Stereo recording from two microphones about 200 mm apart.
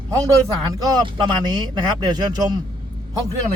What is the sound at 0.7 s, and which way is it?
Speech, 20° right (ahead or behind).